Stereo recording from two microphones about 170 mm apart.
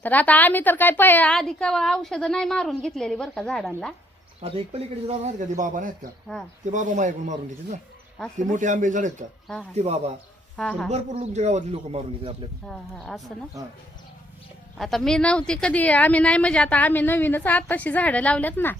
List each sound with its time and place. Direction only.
0.0 s a woman's voice: 10° left (ahead or behind)
4.4 s a man's voice: 35° right (ahead or behind)
10.6 s a woman's voice: centre (ahead or behind)
10.9 s a man's voice: 40° right (ahead or behind)
12.6 s a woman's voice: centre (ahead or behind)
14.8 s speech: centre (ahead or behind)